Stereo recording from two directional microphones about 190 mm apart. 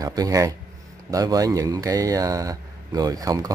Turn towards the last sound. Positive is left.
turn(degrees=-20)  # may be behind; listen again after turning